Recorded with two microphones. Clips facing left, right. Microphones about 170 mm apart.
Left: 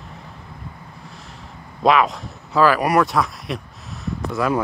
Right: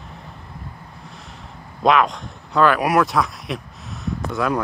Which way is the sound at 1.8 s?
Centre (ahead or behind).